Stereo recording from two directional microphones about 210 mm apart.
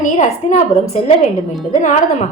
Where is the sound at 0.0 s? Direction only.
35° left (ahead or behind).